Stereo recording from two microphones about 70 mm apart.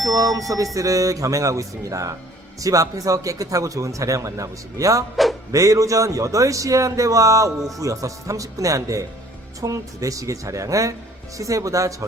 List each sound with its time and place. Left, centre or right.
0.1 s a man's voice: right
5.1 s speech: centre
5.5 s a man's voice: right